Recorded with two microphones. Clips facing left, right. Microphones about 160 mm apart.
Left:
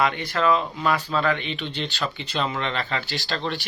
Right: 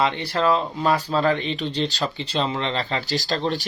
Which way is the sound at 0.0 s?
30° right (ahead or behind).